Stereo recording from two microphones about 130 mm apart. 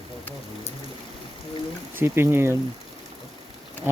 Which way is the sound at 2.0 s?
20° right (ahead or behind).